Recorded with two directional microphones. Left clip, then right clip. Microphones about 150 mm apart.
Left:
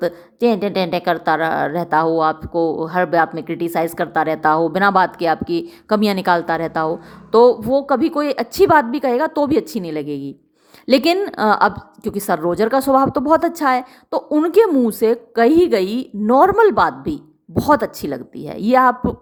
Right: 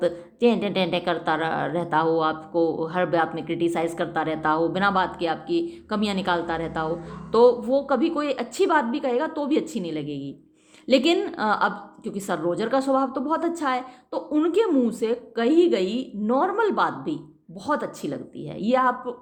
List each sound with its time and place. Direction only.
0.0 s a woman's voice: 35° left (ahead or behind)